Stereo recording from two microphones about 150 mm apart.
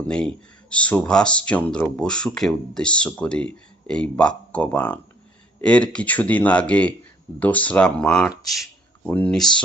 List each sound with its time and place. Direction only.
0.1 s speech: 5° left (ahead or behind)